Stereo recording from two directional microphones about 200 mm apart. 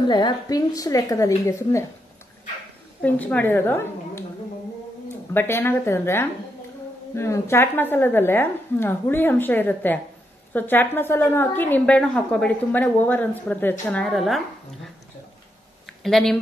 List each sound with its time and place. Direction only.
0.1 s a woman's voice: 20° left (ahead or behind)
3.0 s a woman's voice: 5° left (ahead or behind)
5.3 s a woman's voice: 10° left (ahead or behind)
16.0 s speech: centre (ahead or behind)